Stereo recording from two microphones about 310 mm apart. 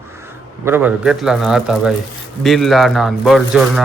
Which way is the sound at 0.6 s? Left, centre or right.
Centre.